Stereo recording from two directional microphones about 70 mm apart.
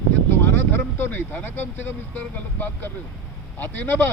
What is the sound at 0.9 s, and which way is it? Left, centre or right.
Speech, left.